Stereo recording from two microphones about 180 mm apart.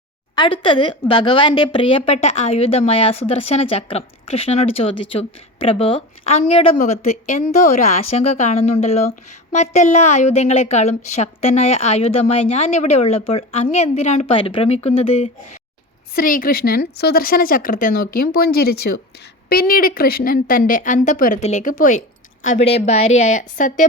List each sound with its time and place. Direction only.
0.3 s speech: 25° left (ahead or behind)
16.1 s a woman's voice: 50° left (ahead or behind)
22.4 s speech: 35° left (ahead or behind)